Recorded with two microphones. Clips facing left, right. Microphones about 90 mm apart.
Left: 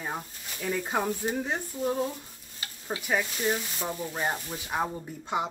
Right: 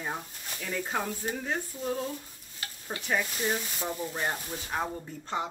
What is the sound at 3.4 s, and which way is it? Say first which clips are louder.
Speech: left 2 dB; centre (ahead or behind).